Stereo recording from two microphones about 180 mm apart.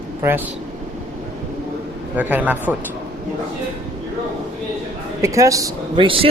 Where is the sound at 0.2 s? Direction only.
15° right (ahead or behind).